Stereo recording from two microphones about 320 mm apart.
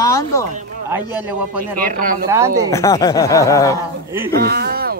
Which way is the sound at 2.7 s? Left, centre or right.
Centre.